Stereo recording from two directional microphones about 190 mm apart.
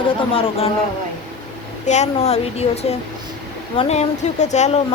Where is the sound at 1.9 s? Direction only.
35° left (ahead or behind).